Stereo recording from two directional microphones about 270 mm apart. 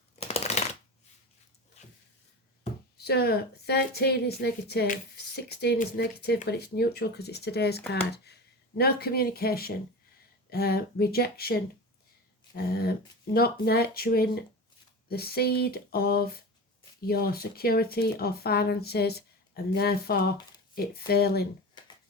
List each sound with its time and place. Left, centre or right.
0.3 s shuffling cards: left
3.0 s a woman's voice: left
21.8 s a sound: centre